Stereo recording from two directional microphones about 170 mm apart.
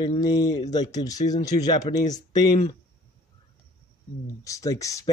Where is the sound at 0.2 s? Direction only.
20° left (ahead or behind).